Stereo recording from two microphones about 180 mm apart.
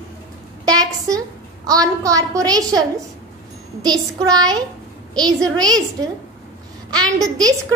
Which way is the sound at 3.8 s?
20° right (ahead or behind).